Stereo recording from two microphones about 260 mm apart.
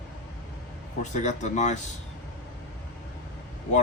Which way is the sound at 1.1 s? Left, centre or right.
Left.